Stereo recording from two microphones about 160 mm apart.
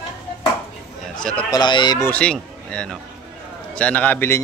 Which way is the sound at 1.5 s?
30° left (ahead or behind).